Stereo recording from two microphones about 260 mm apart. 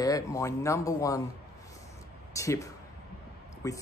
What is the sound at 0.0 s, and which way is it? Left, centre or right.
Speech, centre.